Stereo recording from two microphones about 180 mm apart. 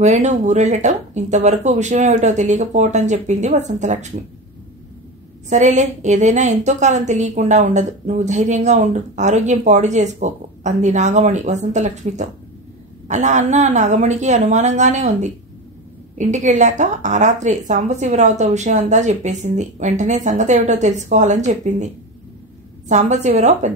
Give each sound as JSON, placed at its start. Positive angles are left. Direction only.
{"t": 0.0, "sound": "a woman's voice", "side_deg": -40}
{"t": 5.5, "sound": "a woman's voice", "side_deg": -40}